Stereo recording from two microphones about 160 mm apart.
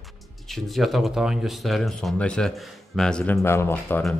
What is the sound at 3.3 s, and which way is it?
Speech, 15° left (ahead or behind).